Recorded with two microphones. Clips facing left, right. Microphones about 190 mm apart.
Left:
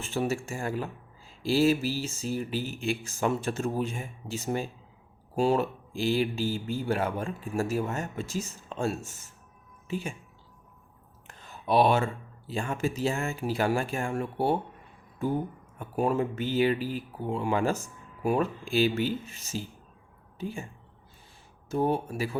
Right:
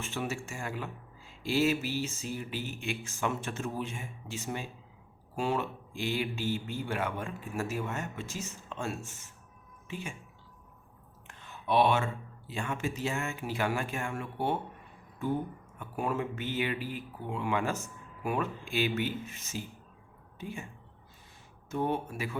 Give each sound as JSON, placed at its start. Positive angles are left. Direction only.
{"t": 0.0, "sound": "speech", "side_deg": 35}
{"t": 11.3, "sound": "speech", "side_deg": 35}
{"t": 15.8, "sound": "speech", "side_deg": 35}
{"t": 21.7, "sound": "speech", "side_deg": 35}